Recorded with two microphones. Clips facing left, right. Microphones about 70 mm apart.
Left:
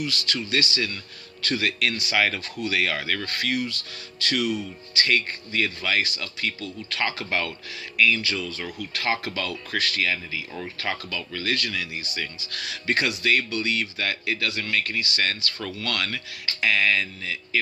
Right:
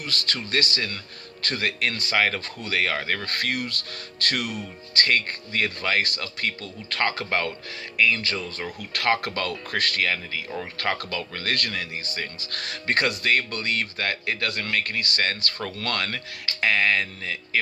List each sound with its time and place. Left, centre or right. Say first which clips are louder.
0.0 s speech: left 2 dB; right
3.2 s speech: left 1 dB; right
8.9 s speech: right 4 dB; right